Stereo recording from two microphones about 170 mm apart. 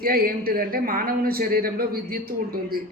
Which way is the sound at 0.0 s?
60° right (ahead or behind).